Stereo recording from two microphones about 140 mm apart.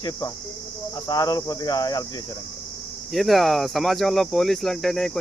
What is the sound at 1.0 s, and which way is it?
Speech, 25° left (ahead or behind).